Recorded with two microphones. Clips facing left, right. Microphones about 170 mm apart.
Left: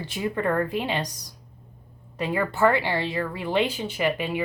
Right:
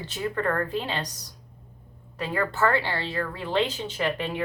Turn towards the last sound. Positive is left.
turn(degrees=10)  # may be behind; listen again after turning